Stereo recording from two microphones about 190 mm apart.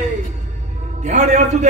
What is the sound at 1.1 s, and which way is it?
Speech, 40° right (ahead or behind).